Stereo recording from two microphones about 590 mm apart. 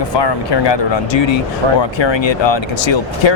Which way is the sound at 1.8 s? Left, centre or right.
Left.